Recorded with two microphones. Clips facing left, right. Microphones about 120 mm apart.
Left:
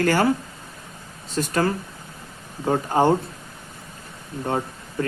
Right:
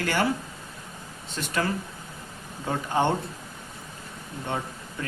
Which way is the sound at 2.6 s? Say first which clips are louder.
Left 6 dB; 40° left (ahead or behind).